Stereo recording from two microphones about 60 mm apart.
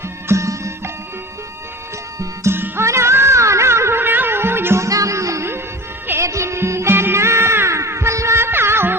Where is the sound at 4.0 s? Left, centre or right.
Right.